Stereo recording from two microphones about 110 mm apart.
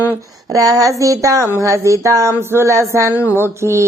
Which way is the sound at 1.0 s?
30° right (ahead or behind).